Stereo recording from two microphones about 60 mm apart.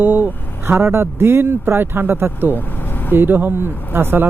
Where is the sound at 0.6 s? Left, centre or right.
Right.